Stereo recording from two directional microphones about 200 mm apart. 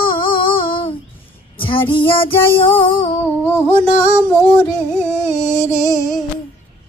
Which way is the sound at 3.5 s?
10° left (ahead or behind).